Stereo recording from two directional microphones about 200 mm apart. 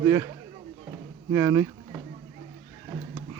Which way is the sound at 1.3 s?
15° right (ahead or behind).